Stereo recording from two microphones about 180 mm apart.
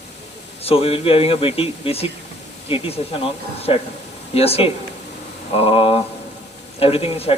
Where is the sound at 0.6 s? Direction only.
30° left (ahead or behind).